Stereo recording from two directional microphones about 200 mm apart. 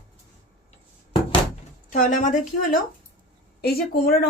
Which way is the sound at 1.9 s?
40° left (ahead or behind).